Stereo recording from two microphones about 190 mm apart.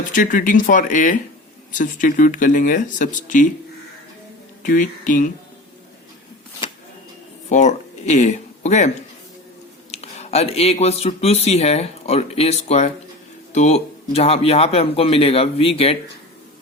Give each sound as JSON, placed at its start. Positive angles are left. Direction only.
{"t": 0.1, "sound": "speech", "side_deg": 45}
{"t": 4.6, "sound": "speech", "side_deg": 45}
{"t": 7.5, "sound": "speech", "side_deg": 40}